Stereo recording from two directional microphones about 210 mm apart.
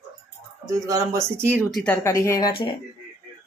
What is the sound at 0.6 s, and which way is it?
Speech, 15° right (ahead or behind).